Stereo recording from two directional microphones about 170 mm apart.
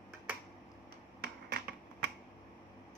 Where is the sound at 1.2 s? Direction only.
75° right (ahead or behind).